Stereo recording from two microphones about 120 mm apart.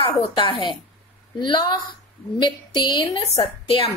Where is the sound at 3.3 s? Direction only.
55° left (ahead or behind).